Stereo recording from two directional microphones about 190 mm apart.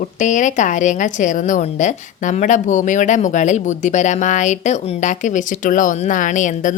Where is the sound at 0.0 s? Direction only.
40° left (ahead or behind).